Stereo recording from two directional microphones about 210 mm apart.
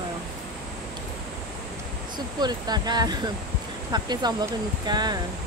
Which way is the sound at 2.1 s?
20° right (ahead or behind).